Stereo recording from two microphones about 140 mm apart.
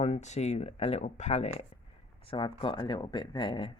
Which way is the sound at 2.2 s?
35° left (ahead or behind).